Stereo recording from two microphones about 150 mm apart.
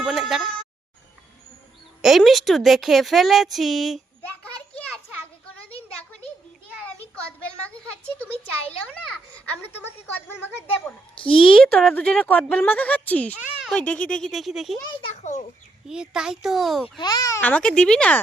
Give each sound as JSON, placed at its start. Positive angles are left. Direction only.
{"t": 0.0, "sound": "a sound", "side_deg": 0}
{"t": 2.0, "sound": "a woman's voice", "side_deg": 0}
{"t": 10.2, "sound": "a woman's voice", "side_deg": 10}
{"t": 11.2, "sound": "speech", "side_deg": 35}
{"t": 11.5, "sound": "a woman's voice", "side_deg": 5}
{"t": 15.1, "sound": "a child's voice", "side_deg": 50}
{"t": 15.9, "sound": "a woman's voice", "side_deg": -5}
{"t": 17.0, "sound": "a child's voice", "side_deg": 25}
{"t": 17.4, "sound": "a woman's voice", "side_deg": 10}